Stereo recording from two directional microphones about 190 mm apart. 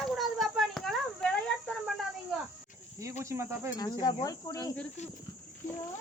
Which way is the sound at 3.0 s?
15° right (ahead or behind).